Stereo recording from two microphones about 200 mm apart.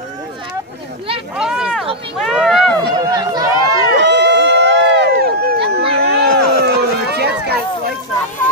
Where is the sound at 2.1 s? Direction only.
Centre (ahead or behind).